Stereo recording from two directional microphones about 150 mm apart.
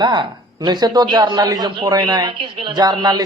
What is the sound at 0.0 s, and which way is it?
A man's voice, 30° right (ahead or behind).